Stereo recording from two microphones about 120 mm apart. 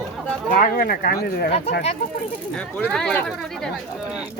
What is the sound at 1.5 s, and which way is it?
Speech, 60° left (ahead or behind).